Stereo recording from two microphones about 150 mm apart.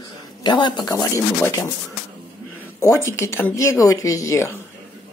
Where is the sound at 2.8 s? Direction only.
20° left (ahead or behind).